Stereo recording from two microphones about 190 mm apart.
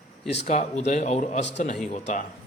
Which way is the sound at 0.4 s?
40° left (ahead or behind).